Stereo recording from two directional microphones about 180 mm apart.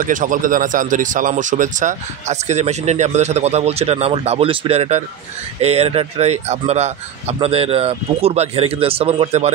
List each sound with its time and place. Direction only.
0.0 s speech: 45° right (ahead or behind)